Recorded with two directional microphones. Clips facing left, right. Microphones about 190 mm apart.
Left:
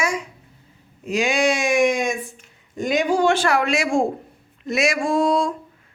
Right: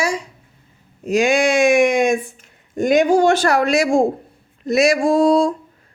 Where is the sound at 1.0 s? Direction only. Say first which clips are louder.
Right 4 dB; 45° right (ahead or behind).